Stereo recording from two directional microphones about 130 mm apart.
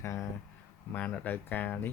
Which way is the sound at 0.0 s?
20° left (ahead or behind).